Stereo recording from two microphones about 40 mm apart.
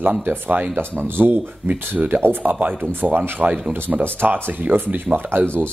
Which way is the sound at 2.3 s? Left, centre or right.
Right.